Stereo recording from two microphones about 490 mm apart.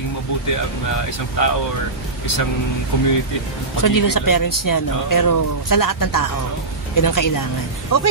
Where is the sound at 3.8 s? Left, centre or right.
Left.